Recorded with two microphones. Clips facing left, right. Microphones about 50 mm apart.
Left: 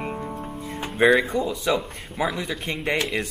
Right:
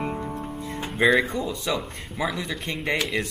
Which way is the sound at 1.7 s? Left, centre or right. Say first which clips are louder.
Left 3 dB; left.